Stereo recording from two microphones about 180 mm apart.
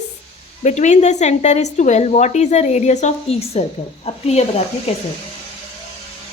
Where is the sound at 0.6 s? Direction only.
40° left (ahead or behind).